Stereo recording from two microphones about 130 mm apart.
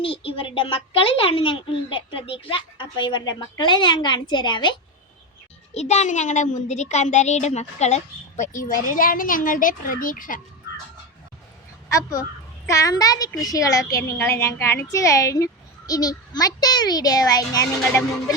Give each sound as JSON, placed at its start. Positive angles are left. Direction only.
{"t": 0.0, "sound": "a woman's voice", "side_deg": 45}
{"t": 5.7, "sound": "speech", "side_deg": 60}
{"t": 11.9, "sound": "a woman's voice", "side_deg": 25}